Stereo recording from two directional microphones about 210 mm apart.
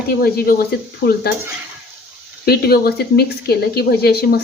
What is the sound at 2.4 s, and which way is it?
A woman's voice, 50° left (ahead or behind).